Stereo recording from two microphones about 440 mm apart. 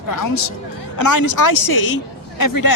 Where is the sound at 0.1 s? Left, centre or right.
Left.